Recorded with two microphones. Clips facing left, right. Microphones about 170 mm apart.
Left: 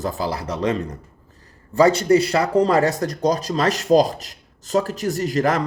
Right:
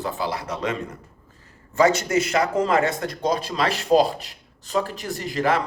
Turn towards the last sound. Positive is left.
turn(degrees=40)  # may be behind; listen again after turning